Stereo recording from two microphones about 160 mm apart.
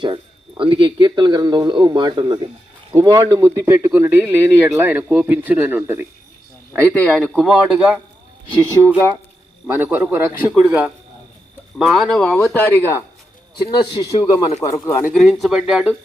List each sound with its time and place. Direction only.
0.0 s speech: 30° right (ahead or behind); by 6.1 s 10° right (ahead or behind)
6.8 s a man's voice: 10° left (ahead or behind)
9.6 s speech: 15° right (ahead or behind)
11.9 s a man's voice: centre (ahead or behind)
13.6 s a man's voice: 25° left (ahead or behind)
15.1 s a man's voice: centre (ahead or behind)